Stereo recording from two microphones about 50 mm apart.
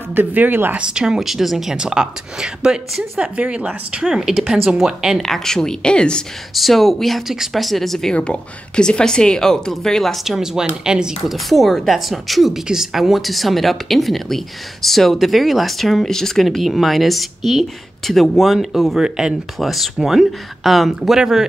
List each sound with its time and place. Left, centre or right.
0.1 s speech: right
0.7 s speech: centre
4.0 s speech: centre
6.5 s speech: centre
8.1 s speech: centre
10.2 s speech: centre
11.2 s speech: centre
18.9 s speech: centre